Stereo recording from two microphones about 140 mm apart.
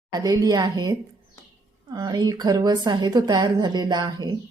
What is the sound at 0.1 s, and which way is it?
A woman's voice, 30° right (ahead or behind).